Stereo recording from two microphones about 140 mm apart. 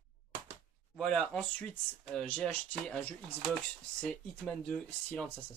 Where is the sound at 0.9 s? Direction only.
5° left (ahead or behind).